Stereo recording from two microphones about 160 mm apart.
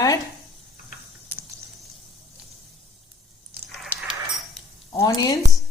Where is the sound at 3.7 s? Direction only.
Centre (ahead or behind).